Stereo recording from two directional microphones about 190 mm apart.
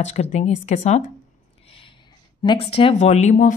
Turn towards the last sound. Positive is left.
turn(degrees=40)  # may be behind; listen again after turning